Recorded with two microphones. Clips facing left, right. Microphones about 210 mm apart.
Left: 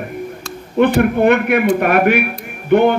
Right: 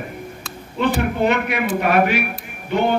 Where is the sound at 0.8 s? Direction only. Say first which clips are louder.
Left 7 dB; 55° left (ahead or behind).